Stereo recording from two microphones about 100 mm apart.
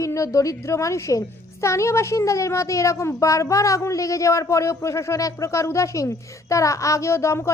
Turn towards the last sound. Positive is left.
turn(degrees=30)  # may be behind; listen again after turning